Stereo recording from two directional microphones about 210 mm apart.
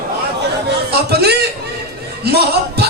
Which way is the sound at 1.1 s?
50° right (ahead or behind).